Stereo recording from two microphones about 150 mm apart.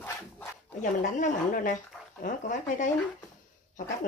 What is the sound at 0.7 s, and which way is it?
Speech, 55° left (ahead or behind).